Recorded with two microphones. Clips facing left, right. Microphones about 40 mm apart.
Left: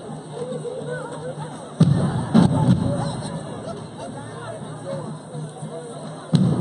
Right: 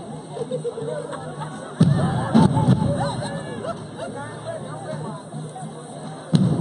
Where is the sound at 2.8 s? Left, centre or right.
Right.